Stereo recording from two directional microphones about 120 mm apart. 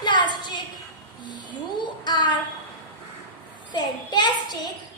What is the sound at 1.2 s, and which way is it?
Child singing, 40° left (ahead or behind).